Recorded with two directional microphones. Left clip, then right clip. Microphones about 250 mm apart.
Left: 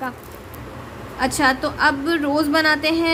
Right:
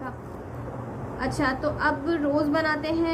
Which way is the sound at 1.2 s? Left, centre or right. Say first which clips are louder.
Left 8 dB; left.